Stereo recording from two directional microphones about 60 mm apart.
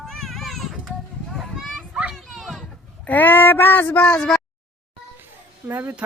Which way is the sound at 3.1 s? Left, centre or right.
Left.